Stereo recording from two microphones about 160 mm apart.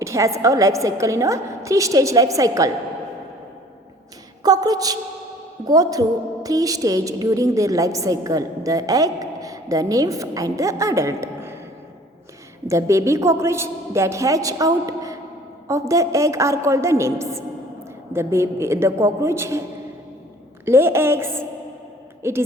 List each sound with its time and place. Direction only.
0.0 s a woman's voice: 20° right (ahead or behind)
4.4 s a sound: 25° right (ahead or behind)
5.6 s a woman's voice: 25° right (ahead or behind)
12.6 s a woman's voice: 20° right (ahead or behind)
20.7 s a woman's voice: 15° right (ahead or behind)